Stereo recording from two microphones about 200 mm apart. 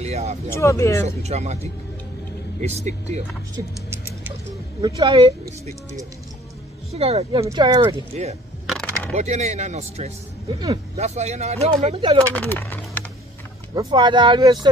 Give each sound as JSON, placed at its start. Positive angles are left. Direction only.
{"t": 0.0, "sound": "speech", "side_deg": -30}
{"t": 0.6, "sound": "speech", "side_deg": 15}
{"t": 1.0, "sound": "speech", "side_deg": -35}
{"t": 4.8, "sound": "speech", "side_deg": -25}
{"t": 6.9, "sound": "speech", "side_deg": -30}
{"t": 7.4, "sound": "speech", "side_deg": -20}
{"t": 8.1, "sound": "speech", "side_deg": -35}
{"t": 8.6, "sound": "a sound", "side_deg": 5}
{"t": 9.1, "sound": "speech", "side_deg": -35}
{"t": 12.4, "sound": "speech", "side_deg": 10}
{"t": 13.7, "sound": "speech", "side_deg": -20}